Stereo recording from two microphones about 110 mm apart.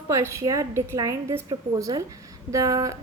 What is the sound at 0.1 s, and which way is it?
A woman's voice, 25° right (ahead or behind).